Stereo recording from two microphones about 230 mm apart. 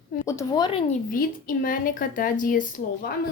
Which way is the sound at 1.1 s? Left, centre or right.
Left.